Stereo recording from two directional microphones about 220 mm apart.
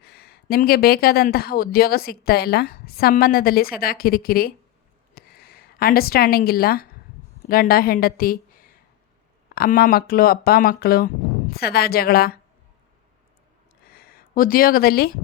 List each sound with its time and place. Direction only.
0.0 s a woman's voice: 45° left (ahead or behind)
5.1 s a sound: 45° left (ahead or behind)
7.4 s a woman's voice: 40° left (ahead or behind)
13.8 s speech: 45° left (ahead or behind)